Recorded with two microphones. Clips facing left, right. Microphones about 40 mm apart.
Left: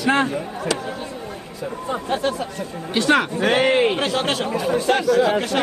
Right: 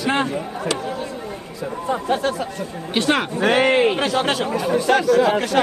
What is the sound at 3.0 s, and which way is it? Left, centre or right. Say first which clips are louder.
Speech: left 1 dB; centre.